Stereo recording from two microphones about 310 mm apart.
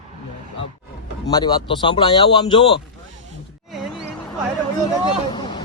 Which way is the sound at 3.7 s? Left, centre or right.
Centre.